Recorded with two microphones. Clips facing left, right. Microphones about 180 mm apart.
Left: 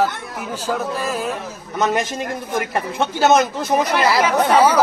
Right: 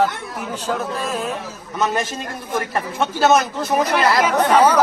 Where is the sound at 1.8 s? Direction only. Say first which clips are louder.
Left 2 dB; 20° left (ahead or behind).